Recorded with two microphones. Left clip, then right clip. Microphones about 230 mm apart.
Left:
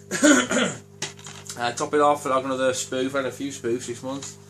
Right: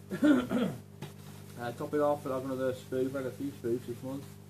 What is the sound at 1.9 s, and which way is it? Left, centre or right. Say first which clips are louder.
Speech: left 10 dB; left.